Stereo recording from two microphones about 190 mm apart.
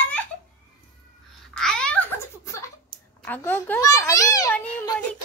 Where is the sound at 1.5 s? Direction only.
5° left (ahead or behind).